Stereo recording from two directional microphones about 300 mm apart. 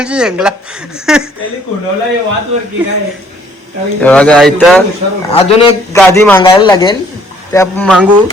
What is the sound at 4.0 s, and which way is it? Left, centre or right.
Speech, centre.